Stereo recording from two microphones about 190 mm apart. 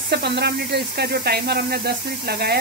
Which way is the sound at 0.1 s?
60° right (ahead or behind).